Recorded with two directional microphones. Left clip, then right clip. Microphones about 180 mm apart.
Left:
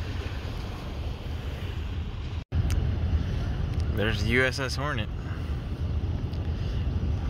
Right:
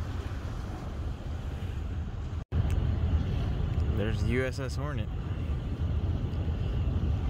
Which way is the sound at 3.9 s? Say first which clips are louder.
Left 7 dB; centre (ahead or behind).